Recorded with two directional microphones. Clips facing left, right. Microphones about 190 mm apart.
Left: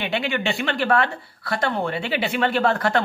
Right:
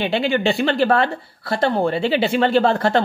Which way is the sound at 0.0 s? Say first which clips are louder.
Right 6 dB; 30° right (ahead or behind).